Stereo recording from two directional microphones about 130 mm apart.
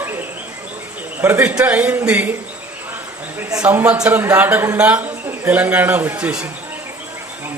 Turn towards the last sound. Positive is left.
turn(degrees=-10)  # may be behind; listen again after turning